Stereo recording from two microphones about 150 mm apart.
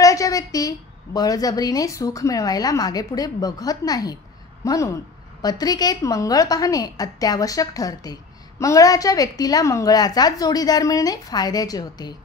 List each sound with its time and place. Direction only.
0.0 s a woman's voice: 25° left (ahead or behind)